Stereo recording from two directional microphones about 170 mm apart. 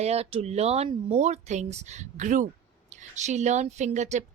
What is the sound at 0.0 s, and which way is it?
A woman's voice, 40° right (ahead or behind).